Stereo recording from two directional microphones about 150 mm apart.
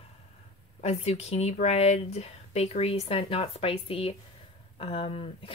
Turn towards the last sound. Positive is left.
turn(degrees=35)  # may be behind; listen again after turning